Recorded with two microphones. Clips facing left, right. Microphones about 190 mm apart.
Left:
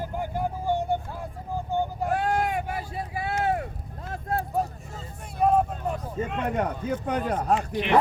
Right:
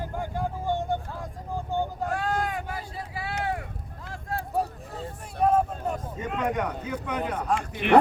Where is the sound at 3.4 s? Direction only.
25° left (ahead or behind).